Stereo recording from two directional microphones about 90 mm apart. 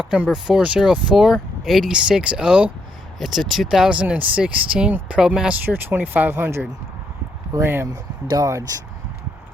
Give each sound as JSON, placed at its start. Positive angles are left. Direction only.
{"t": 0.0, "sound": "speech", "side_deg": -5}
{"t": 5.6, "sound": "speech", "side_deg": -20}
{"t": 7.9, "sound": "speech", "side_deg": -45}